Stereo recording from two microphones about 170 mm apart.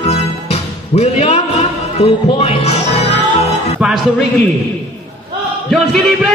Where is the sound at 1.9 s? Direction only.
35° left (ahead or behind).